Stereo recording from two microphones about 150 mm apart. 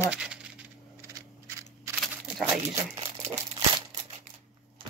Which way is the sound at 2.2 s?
5° right (ahead or behind).